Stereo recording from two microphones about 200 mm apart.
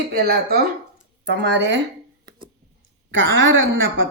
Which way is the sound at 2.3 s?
20° right (ahead or behind).